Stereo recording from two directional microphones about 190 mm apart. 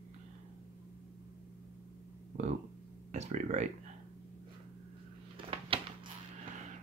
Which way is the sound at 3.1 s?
40° right (ahead or behind).